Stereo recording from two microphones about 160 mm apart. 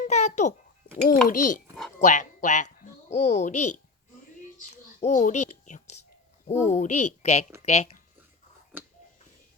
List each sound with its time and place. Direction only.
0.0 s a sound: 45° left (ahead or behind)
1.0 s a child's voice: 55° left (ahead or behind)
4.9 s a child's voice: 55° left (ahead or behind)